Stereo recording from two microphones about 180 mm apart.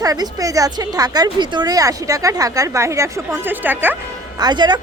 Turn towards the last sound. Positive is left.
turn(degrees=-25)  # may be behind; listen again after turning